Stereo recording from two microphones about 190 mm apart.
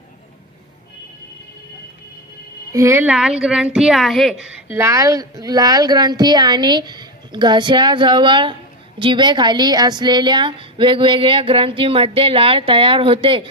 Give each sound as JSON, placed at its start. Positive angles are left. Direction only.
{"t": 2.7, "sound": "a woman's voice", "side_deg": -15}